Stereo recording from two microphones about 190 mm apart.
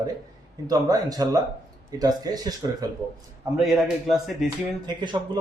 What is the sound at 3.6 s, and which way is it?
Speech, centre (ahead or behind).